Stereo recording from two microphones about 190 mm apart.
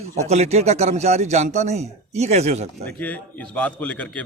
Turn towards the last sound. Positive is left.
turn(degrees=5)  # may be behind; listen again after turning